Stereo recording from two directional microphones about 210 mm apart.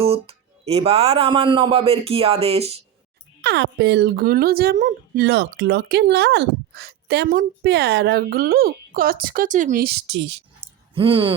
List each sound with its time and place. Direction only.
0.0 s speech: 30° right (ahead or behind)
3.4 s speech: 55° right (ahead or behind)
10.9 s speech: 25° right (ahead or behind)